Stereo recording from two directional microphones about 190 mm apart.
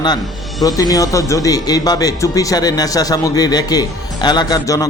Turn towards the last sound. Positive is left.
turn(degrees=20)  # may be behind; listen again after turning